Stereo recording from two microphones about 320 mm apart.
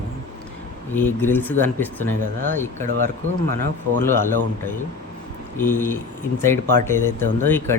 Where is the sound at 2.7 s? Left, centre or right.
Right.